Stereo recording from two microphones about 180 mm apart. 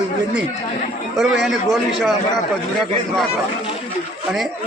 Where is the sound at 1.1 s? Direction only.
Centre (ahead or behind).